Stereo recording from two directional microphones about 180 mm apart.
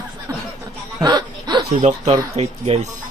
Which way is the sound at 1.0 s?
20° right (ahead or behind).